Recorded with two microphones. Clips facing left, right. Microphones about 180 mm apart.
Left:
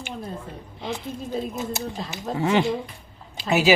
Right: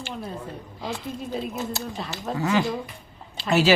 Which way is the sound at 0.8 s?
20° left (ahead or behind).